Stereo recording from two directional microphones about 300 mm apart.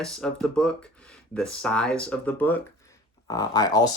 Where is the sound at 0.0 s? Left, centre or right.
Centre.